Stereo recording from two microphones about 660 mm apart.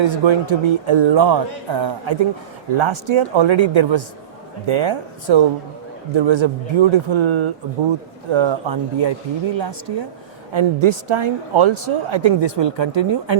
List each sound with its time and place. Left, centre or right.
0.0 s a woman's voice: right